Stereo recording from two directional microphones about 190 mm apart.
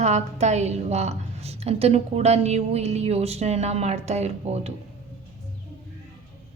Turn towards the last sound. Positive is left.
turn(degrees=-35)  # may be behind; listen again after turning